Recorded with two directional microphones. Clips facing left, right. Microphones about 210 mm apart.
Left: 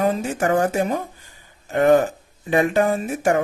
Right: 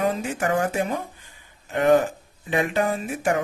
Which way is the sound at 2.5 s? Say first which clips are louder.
Left 5 dB; 40° left (ahead or behind).